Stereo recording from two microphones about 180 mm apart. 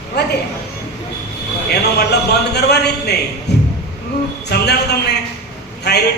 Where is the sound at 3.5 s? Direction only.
70° left (ahead or behind).